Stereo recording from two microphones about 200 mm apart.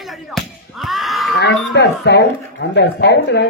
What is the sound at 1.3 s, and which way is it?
Speech, 55° left (ahead or behind).